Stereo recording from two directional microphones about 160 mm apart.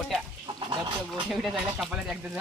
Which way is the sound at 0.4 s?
30° right (ahead or behind).